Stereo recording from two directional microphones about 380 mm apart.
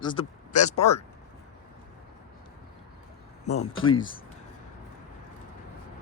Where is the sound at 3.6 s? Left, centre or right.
Left.